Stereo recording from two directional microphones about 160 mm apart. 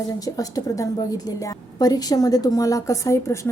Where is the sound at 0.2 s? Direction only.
20° left (ahead or behind).